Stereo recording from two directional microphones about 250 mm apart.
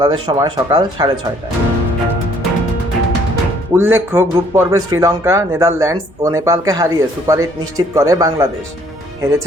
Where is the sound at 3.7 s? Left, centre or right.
Centre.